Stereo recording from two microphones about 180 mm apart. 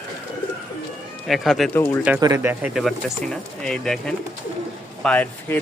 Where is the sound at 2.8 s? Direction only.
Centre (ahead or behind).